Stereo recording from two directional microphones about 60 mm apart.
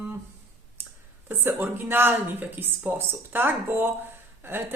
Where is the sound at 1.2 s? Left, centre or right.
Right.